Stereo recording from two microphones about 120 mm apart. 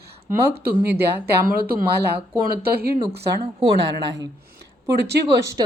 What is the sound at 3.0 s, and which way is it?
Speech, 45° right (ahead or behind).